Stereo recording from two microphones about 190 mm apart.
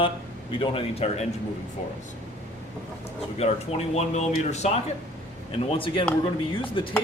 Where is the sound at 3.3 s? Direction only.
35° left (ahead or behind).